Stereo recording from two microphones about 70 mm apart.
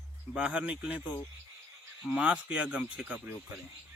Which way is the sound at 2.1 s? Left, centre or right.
Centre.